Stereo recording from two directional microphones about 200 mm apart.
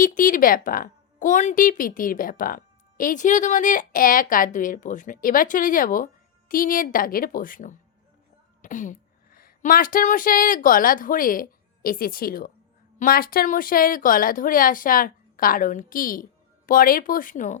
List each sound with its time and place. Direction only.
0.0 s a woman's voice: 40° left (ahead or behind)